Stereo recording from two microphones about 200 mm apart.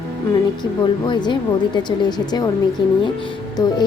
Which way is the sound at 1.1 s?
20° left (ahead or behind).